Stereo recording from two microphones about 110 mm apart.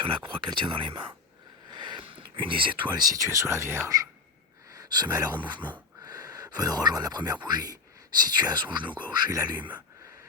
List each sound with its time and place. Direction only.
0.0 s speech: 50° right (ahead or behind)
6.0 s a sound: 35° right (ahead or behind)
7.4 s speech: 40° right (ahead or behind)